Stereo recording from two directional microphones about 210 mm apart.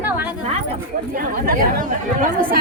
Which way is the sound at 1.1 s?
40° right (ahead or behind).